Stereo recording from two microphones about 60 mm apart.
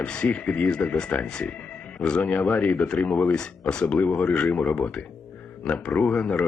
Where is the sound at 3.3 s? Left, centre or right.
Centre.